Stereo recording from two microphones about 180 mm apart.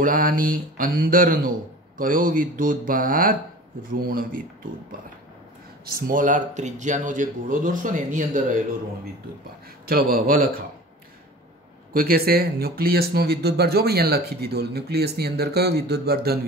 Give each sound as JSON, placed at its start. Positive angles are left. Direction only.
{"t": 0.0, "sound": "speech", "side_deg": -50}
{"t": 5.9, "sound": "speech", "side_deg": -50}
{"t": 9.8, "sound": "speech", "side_deg": -55}
{"t": 11.9, "sound": "speech", "side_deg": -55}